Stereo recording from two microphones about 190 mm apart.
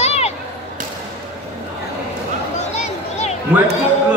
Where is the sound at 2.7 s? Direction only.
35° left (ahead or behind).